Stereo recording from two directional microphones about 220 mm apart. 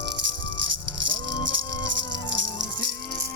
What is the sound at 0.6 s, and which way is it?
Rattle, 55° right (ahead or behind).